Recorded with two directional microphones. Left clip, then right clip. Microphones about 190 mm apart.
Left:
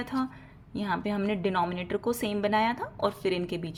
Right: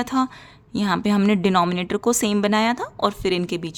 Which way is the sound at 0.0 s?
40° right (ahead or behind).